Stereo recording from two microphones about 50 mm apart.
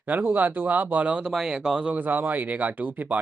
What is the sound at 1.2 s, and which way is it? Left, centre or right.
Speech, centre.